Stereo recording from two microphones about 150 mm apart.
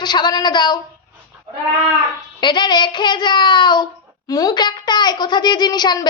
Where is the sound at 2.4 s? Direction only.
30° left (ahead or behind).